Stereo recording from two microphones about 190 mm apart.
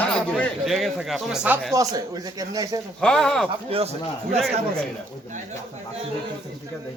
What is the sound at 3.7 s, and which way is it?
Speech, 30° right (ahead or behind).